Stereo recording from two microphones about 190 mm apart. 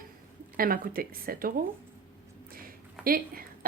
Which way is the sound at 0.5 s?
50° right (ahead or behind).